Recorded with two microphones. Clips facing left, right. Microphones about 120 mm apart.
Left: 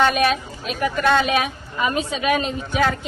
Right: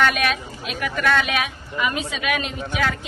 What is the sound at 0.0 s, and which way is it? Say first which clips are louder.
A woman's voice: left 3 dB; 30° left (ahead or behind).